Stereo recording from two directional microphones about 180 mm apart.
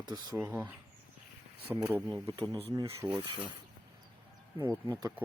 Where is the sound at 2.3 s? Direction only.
30° right (ahead or behind).